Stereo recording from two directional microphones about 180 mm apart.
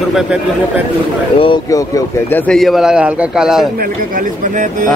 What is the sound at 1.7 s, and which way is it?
Speech, 15° left (ahead or behind).